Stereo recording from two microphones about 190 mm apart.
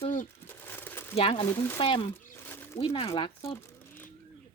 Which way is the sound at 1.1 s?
30° left (ahead or behind).